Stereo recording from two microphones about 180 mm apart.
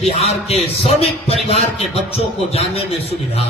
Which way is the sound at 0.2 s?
35° left (ahead or behind).